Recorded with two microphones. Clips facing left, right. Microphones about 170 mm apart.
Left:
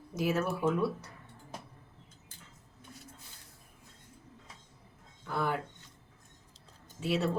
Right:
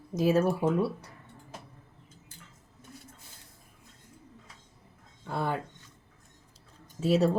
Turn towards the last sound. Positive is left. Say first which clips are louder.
# right 6 dB
turn(degrees=-40)  # may be behind; listen again after turning